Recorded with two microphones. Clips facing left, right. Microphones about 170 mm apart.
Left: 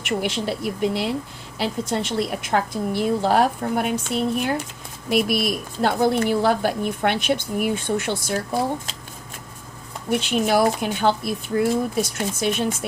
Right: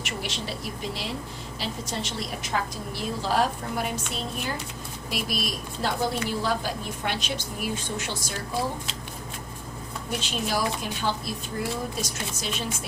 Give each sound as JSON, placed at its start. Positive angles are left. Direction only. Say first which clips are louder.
{"t": 0.0, "sound": "a woman's voice", "louder": "left 9 dB", "side_deg": 60}
{"t": 10.1, "sound": "a woman's voice", "louder": "left 9 dB", "side_deg": 60}